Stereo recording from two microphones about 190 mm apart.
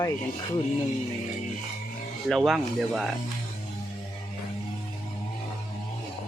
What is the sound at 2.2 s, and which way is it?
Speech, centre (ahead or behind).